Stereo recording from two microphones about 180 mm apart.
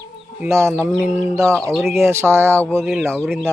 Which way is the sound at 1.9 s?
15° right (ahead or behind).